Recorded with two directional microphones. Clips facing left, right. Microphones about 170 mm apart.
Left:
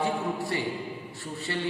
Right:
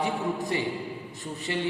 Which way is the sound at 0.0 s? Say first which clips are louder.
Even; 20° right (ahead or behind).